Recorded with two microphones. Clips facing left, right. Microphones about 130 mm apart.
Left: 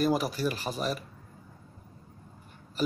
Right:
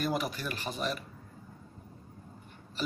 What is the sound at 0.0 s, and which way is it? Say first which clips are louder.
Speech: left 6 dB; 40° left (ahead or behind).